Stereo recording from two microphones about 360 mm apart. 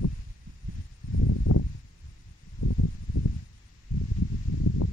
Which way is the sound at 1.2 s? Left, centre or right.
Left.